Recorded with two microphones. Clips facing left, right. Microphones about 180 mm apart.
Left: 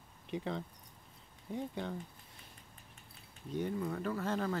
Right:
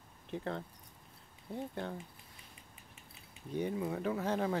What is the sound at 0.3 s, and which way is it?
Speech, centre (ahead or behind).